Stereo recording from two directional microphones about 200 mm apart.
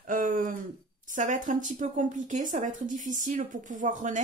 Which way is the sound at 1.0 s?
40° right (ahead or behind).